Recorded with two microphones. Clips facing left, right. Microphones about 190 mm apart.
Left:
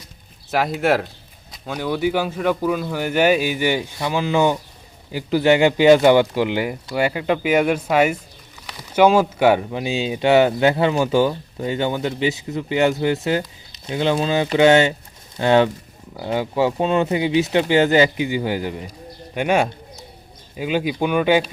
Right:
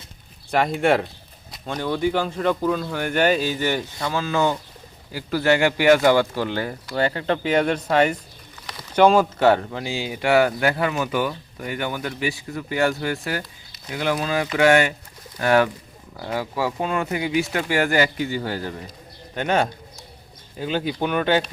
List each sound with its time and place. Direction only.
0.5 s speech: 5° left (ahead or behind)
19.3 s a sound: 10° left (ahead or behind)
20.6 s speech: 10° left (ahead or behind)